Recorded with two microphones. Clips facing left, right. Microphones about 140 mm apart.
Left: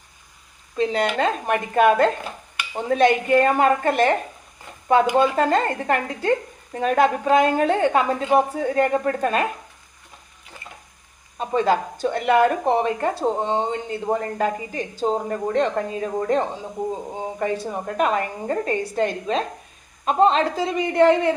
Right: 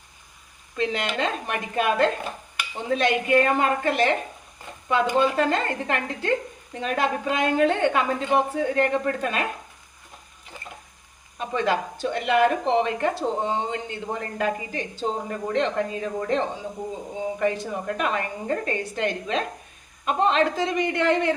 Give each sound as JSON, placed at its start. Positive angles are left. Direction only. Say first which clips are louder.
{"t": 0.8, "sound": "a woman's voice", "louder": "left 5 dB", "side_deg": 40}
{"t": 11.3, "sound": "a woman's voice", "louder": "left 4 dB", "side_deg": 35}
{"t": 12.0, "sound": "a woman's voice", "louder": "left 3 dB", "side_deg": 50}
{"t": 13.5, "sound": "a woman's voice", "louder": "left 4 dB", "side_deg": 35}